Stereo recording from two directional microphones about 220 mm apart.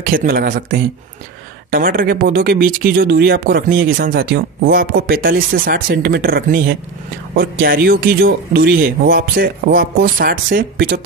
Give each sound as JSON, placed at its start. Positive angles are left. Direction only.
{"t": 0.1, "sound": "speech", "side_deg": -40}